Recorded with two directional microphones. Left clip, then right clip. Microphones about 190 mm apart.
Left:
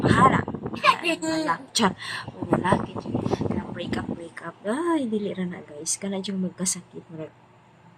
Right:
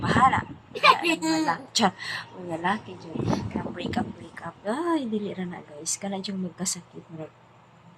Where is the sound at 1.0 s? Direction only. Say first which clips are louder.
Right 1 dB; 60° right (ahead or behind).